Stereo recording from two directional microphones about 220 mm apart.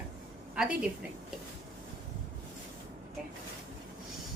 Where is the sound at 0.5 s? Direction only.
5° right (ahead or behind).